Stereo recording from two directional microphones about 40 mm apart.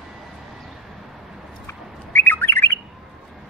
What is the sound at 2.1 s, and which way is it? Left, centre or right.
Bird, left.